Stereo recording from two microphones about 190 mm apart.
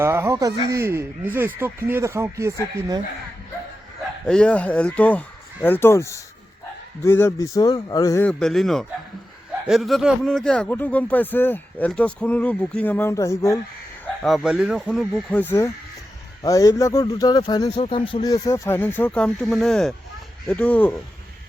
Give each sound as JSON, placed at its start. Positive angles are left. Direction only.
{"t": 0.0, "sound": "speech", "side_deg": -15}
{"t": 4.3, "sound": "speech", "side_deg": 5}
{"t": 14.0, "sound": "speech", "side_deg": 0}